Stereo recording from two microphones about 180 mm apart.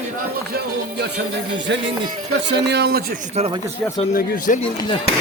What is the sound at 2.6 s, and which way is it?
Speech, 70° right (ahead or behind).